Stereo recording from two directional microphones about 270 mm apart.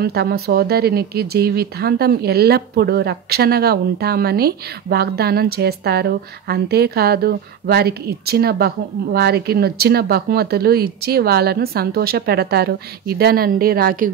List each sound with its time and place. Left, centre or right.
0.0 s speech: right